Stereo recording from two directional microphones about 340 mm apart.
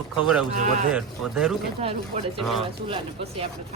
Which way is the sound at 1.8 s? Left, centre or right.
Centre.